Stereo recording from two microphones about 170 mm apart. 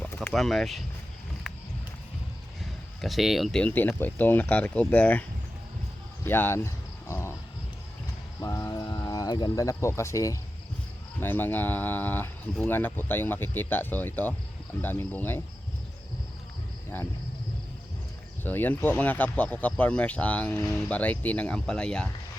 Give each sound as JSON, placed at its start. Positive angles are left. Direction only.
{"t": 0.0, "sound": "a sound", "side_deg": 10}
{"t": 0.3, "sound": "speech", "side_deg": 0}
{"t": 3.0, "sound": "speech", "side_deg": 0}
{"t": 6.2, "sound": "speech", "side_deg": 10}
{"t": 7.1, "sound": "a sound", "side_deg": 15}
{"t": 8.4, "sound": "speech", "side_deg": 20}
{"t": 18.4, "sound": "speech", "side_deg": 10}